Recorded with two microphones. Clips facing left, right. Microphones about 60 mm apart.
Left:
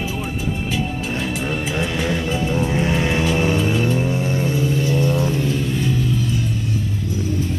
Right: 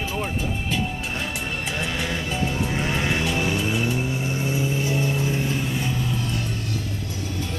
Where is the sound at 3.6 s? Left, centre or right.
Centre.